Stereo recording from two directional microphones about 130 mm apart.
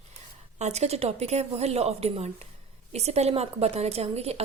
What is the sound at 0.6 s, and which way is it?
A woman's voice, 55° right (ahead or behind).